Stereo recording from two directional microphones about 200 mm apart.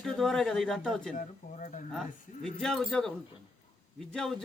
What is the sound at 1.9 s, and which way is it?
A man's voice, 5° left (ahead or behind).